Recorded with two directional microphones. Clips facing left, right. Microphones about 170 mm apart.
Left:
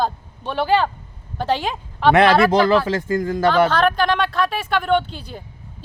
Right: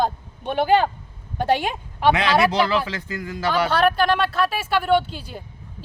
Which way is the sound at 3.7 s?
10° right (ahead or behind).